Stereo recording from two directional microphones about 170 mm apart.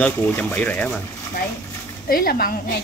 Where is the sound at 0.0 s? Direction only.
10° left (ahead or behind).